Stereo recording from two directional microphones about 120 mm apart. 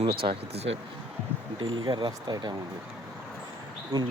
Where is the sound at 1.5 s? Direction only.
40° right (ahead or behind).